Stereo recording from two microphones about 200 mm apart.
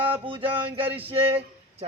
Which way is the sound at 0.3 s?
25° right (ahead or behind).